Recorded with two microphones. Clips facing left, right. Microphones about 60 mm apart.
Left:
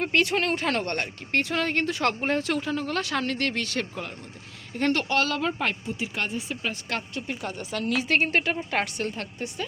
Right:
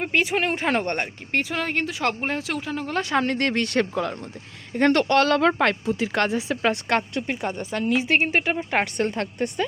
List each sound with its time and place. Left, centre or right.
0.0 s speech: centre
2.9 s speech: right
3.3 s speech: right
3.9 s speech: right
4.8 s speech: right
5.4 s speech: right
6.8 s speech: right
7.4 s speech: right; by 8.5 s centre
8.5 s speech: right
9.1 s speech: right